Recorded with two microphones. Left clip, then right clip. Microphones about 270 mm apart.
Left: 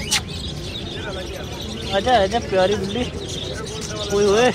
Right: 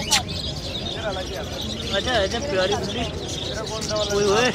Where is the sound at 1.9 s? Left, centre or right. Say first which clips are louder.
Left 6 dB; centre.